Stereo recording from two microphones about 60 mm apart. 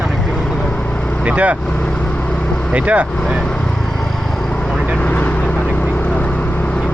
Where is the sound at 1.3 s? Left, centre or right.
Right.